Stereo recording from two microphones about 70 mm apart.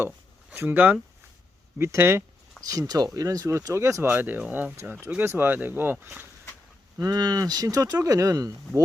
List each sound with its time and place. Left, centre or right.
0.5 s speech: right
1.8 s speech: right
2.6 s speech: right
3.2 s speech: right
3.8 s speech: right
4.1 s speech: right
5.2 s speech: right
7.0 s speech: right